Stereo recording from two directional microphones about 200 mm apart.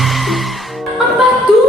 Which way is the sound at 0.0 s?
Centre (ahead or behind).